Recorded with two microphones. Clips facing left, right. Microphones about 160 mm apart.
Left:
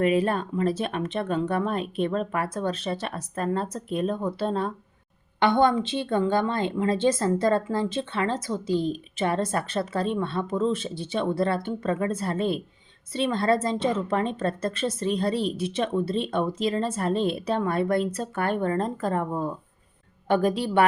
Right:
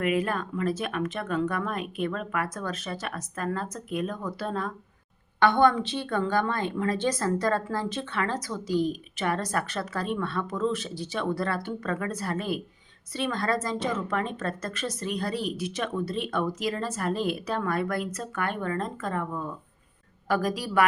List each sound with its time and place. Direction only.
0.0 s a woman's voice: 30° left (ahead or behind)